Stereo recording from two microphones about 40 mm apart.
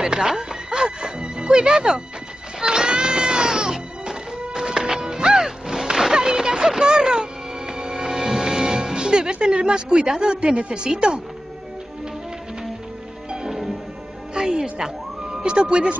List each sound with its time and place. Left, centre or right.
0.0 s music: centre
14.3 s a woman's voice: centre